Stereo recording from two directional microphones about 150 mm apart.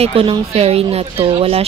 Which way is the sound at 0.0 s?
40° right (ahead or behind).